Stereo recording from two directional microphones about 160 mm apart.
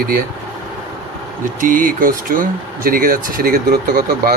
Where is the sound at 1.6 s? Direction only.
60° right (ahead or behind).